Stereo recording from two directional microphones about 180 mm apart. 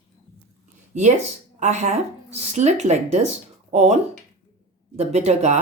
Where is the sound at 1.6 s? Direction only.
40° right (ahead or behind).